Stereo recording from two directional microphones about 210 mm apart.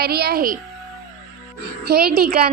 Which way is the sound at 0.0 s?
50° right (ahead or behind).